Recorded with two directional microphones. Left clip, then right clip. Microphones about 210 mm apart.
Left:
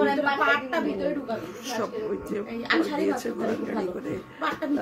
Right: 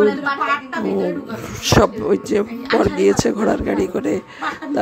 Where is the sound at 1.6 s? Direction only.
40° right (ahead or behind).